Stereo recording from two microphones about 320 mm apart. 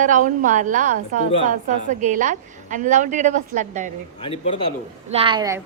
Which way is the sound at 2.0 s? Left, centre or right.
Right.